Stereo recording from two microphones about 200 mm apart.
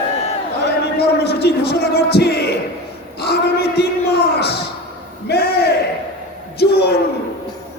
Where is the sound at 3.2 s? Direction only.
55° left (ahead or behind).